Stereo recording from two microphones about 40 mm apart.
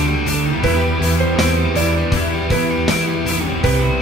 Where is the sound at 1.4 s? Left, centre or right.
Centre.